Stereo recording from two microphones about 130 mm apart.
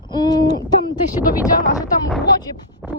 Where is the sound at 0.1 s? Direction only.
30° left (ahead or behind).